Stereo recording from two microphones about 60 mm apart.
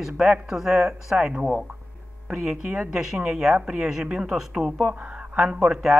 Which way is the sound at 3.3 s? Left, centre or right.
Centre.